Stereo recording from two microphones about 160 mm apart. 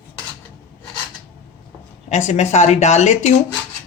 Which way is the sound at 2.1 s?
45° left (ahead or behind).